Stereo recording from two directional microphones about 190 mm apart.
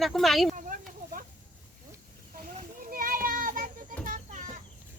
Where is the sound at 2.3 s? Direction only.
50° right (ahead or behind).